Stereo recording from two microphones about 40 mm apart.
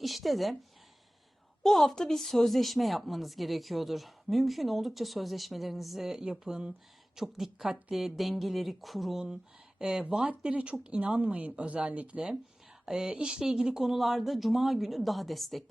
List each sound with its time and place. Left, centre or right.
0.0 s a sound: centre
1.6 s speech: centre
6.1 s speech: centre
7.2 s speech: centre
9.1 s speech: centre
10.2 s speech: right
11.2 s speech: right
12.8 s speech: centre